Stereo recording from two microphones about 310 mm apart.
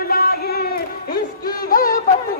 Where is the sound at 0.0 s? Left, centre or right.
Left.